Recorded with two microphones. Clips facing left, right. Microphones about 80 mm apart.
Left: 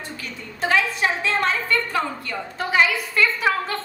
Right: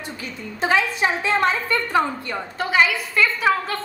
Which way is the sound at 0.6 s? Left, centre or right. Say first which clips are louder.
Right 1 dB; right.